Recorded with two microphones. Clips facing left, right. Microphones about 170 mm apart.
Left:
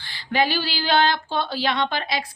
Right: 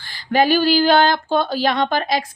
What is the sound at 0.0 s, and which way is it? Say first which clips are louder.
Speech: right 5 dB; 45° right (ahead or behind).